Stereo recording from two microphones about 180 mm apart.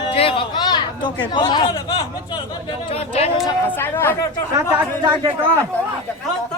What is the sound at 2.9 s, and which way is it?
Speech, 35° left (ahead or behind).